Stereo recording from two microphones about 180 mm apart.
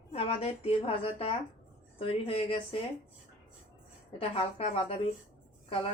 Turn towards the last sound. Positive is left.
turn(degrees=30)  # may be behind; listen again after turning